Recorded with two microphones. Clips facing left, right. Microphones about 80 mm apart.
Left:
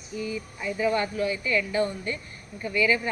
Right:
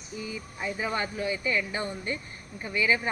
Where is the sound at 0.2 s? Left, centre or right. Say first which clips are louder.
Left 3 dB; right.